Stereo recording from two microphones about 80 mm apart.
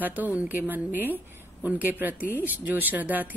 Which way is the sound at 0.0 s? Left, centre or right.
Right.